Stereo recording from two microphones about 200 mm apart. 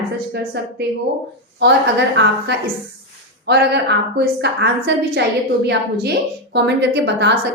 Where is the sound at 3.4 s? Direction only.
55° right (ahead or behind).